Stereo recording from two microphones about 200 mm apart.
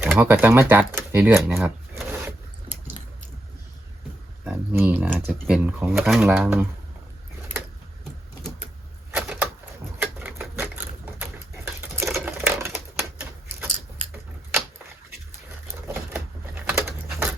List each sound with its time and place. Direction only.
0.0 s speech: 10° right (ahead or behind)
1.5 s a sound: 10° right (ahead or behind)
4.4 s speech: 10° right (ahead or behind)
9.1 s a sound: 5° right (ahead or behind)
11.6 s sewing machine: 10° right (ahead or behind)
12.0 s typewriter: 5° right (ahead or behind)
16.6 s patter: 10° right (ahead or behind)